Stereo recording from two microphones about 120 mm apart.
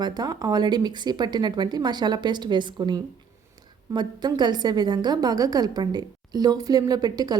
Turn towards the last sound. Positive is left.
turn(degrees=-35)  # may be behind; listen again after turning